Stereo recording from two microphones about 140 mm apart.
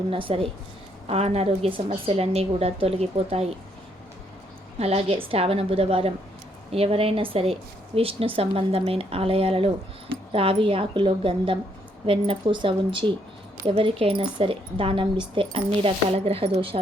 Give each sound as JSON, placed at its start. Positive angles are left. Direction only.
{"t": 0.1, "sound": "speech", "side_deg": -40}
{"t": 4.8, "sound": "speech", "side_deg": -45}